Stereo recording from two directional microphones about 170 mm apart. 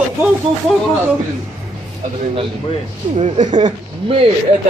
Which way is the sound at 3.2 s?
40° right (ahead or behind).